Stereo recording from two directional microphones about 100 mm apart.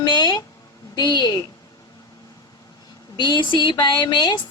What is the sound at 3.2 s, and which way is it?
Female singing, 50° left (ahead or behind).